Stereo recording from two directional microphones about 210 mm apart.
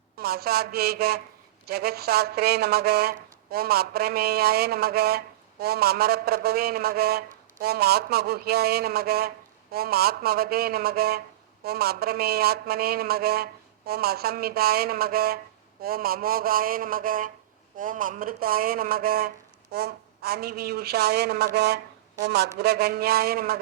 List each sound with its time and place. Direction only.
0.2 s speech: 45° right (ahead or behind)